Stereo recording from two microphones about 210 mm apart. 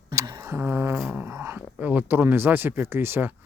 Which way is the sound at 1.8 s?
5° right (ahead or behind).